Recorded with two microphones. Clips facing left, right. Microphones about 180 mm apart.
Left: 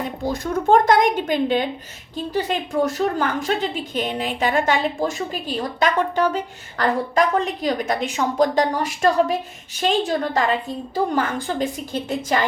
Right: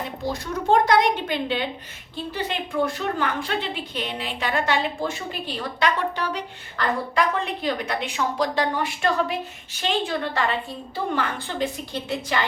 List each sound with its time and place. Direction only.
0.3 s a woman's voice: 50° left (ahead or behind)